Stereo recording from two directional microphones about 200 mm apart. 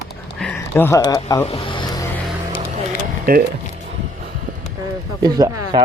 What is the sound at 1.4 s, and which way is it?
Vehicle, 30° left (ahead or behind).